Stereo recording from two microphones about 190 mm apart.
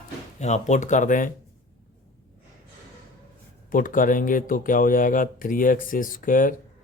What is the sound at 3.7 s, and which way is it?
Speech, 45° left (ahead or behind).